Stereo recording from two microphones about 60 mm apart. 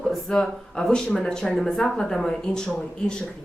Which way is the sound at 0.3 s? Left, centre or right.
Centre.